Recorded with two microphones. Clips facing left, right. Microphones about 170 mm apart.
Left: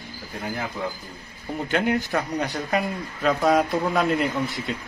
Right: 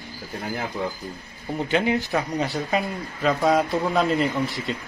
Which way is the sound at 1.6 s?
Centre (ahead or behind).